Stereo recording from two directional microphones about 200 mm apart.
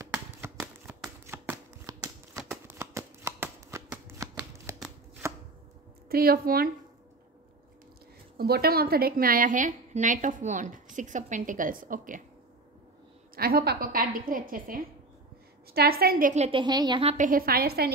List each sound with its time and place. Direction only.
0.0 s shuffling cards: 10° right (ahead or behind)
6.0 s a woman's voice: 50° right (ahead or behind)
8.4 s a woman's voice: 50° right (ahead or behind)
13.4 s a woman's voice: 50° right (ahead or behind)
16.4 s speech: 25° right (ahead or behind)
17.0 s a woman's voice: 30° right (ahead or behind)
17.3 s a woman's voice: 50° right (ahead or behind)